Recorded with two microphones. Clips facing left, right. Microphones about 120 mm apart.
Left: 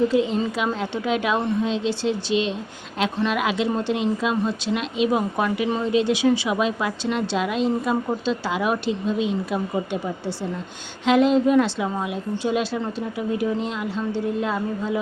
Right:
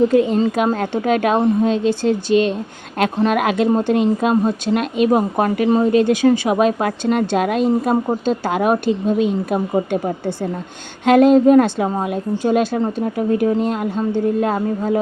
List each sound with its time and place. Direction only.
0.1 s speech: 50° right (ahead or behind)